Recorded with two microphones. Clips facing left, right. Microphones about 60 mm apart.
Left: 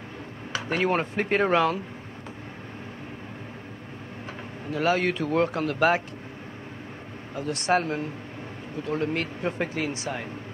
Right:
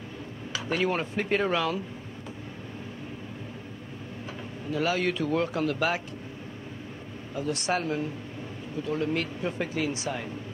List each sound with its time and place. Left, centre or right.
0.5 s speech: left
4.6 s speech: left
7.3 s speech: left